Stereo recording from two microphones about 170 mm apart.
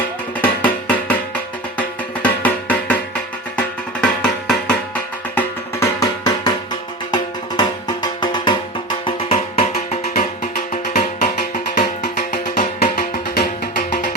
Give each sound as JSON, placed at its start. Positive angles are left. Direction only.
{"t": 0.6, "sound": "music", "side_deg": 10}
{"t": 2.2, "sound": "music", "side_deg": 10}
{"t": 4.0, "sound": "music", "side_deg": 5}
{"t": 10.2, "sound": "music", "side_deg": 50}